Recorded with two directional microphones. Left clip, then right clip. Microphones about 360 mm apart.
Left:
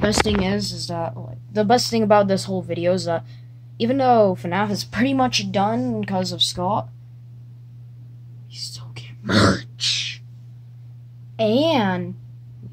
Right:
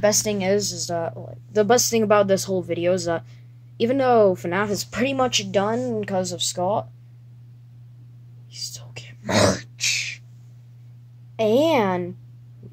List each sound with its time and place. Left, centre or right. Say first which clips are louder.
0.4 s speech: right 2 dB; centre
8.5 s whispering: even; centre
11.3 s speech: even; centre